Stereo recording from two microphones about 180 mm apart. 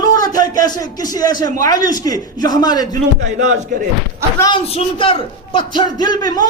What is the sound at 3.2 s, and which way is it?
Speech, 40° right (ahead or behind).